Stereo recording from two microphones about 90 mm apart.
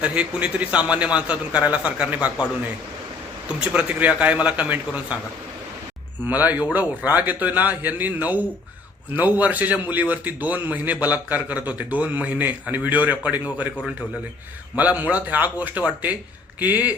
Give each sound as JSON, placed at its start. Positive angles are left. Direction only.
{"t": 0.0, "sound": "a man's voice", "side_deg": -15}
{"t": 3.5, "sound": "a man's voice", "side_deg": -15}
{"t": 6.2, "sound": "a man's voice", "side_deg": -20}
{"t": 14.8, "sound": "a man's voice", "side_deg": -15}